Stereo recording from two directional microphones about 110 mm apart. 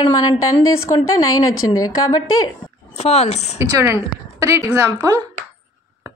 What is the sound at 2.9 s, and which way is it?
Speech, 80° left.